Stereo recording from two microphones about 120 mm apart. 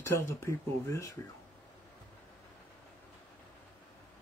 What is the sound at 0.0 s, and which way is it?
Speech, 20° left (ahead or behind).